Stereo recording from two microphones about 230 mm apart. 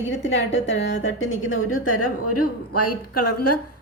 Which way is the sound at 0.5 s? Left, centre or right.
Left.